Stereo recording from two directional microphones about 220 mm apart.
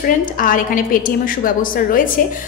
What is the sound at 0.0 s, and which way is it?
A woman's voice, 40° left (ahead or behind).